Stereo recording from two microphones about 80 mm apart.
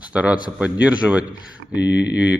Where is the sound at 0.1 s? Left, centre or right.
Centre.